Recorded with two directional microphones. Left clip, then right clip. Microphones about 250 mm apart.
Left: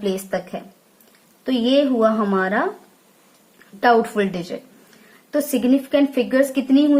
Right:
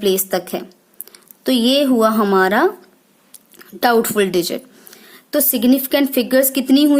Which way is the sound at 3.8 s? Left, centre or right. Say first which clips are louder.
Right 2 dB; right.